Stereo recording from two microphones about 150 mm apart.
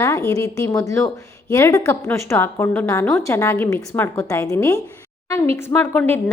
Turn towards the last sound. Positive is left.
turn(degrees=15)  # may be behind; listen again after turning